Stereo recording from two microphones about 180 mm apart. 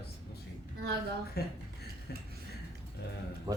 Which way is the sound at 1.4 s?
60° left (ahead or behind).